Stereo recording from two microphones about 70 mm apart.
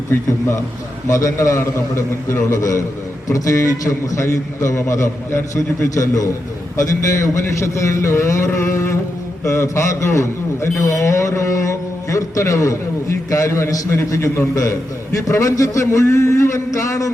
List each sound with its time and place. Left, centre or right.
0.1 s a man's voice: left
1.0 s a man's voice: left